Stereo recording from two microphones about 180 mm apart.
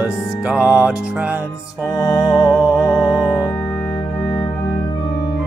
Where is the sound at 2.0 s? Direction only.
20° left (ahead or behind).